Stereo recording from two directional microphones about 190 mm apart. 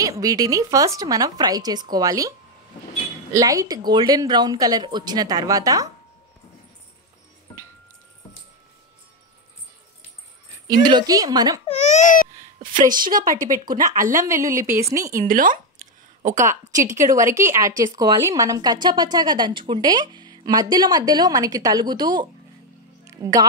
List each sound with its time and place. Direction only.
0.0 s a woman's voice: 20° right (ahead or behind)
3.3 s a woman's voice: 20° right (ahead or behind)
10.7 s a woman's voice: 25° right (ahead or behind)
11.6 s speech: 35° left (ahead or behind)
12.8 s speech: 45° right (ahead or behind)
14.1 s a woman's voice: 15° right (ahead or behind)
15.2 s a sound: 45° right (ahead or behind)
16.7 s a woman's voice: 15° right (ahead or behind)
23.0 s music: 15° right (ahead or behind)